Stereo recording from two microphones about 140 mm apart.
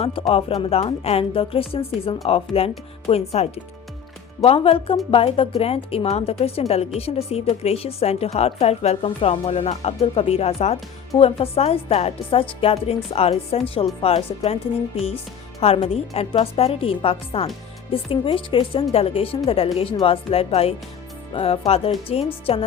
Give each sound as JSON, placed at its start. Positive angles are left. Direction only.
{"t": 0.0, "sound": "a woman's voice", "side_deg": 40}